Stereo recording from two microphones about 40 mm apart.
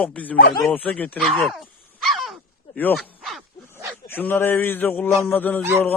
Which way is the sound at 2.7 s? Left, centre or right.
Left.